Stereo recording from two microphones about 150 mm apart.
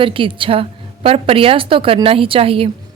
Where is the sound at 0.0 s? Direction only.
35° right (ahead or behind).